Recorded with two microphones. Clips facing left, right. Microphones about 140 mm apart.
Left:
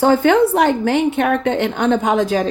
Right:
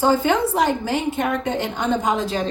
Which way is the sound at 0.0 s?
60° left (ahead or behind).